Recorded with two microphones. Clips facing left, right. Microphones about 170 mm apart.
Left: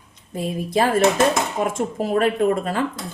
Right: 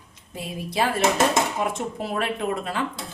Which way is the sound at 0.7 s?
45° left (ahead or behind).